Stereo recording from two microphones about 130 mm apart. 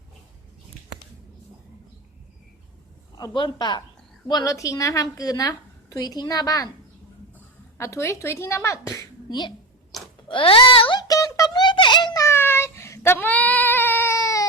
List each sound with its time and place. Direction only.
3.2 s a man's voice: 35° left (ahead or behind)
7.8 s a woman's voice: 25° left (ahead or behind)
10.2 s speech: 45° left (ahead or behind)
11.1 s a sound: 25° left (ahead or behind)
12.2 s child singing: 20° left (ahead or behind)